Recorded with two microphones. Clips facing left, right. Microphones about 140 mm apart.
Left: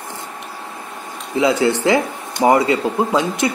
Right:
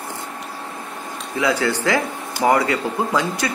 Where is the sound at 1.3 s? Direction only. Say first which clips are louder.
Left 4 dB; 20° left (ahead or behind).